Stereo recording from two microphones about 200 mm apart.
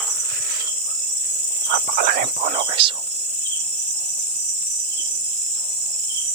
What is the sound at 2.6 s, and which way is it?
Speech, 25° right (ahead or behind).